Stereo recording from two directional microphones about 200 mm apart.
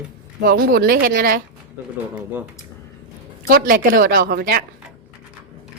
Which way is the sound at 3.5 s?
45° right (ahead or behind).